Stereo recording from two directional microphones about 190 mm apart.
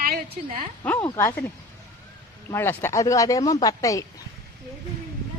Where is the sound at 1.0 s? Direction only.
15° left (ahead or behind).